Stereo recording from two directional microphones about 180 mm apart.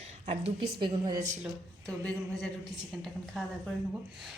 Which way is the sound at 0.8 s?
25° right (ahead or behind).